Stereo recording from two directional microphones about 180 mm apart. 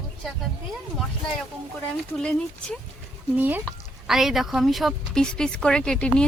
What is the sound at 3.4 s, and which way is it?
Speech, 10° right (ahead or behind).